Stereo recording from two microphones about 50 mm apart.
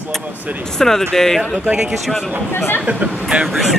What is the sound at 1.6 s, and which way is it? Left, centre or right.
Speech, right.